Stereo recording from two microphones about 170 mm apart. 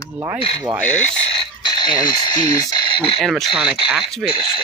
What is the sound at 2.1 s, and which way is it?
Speech, 25° left (ahead or behind).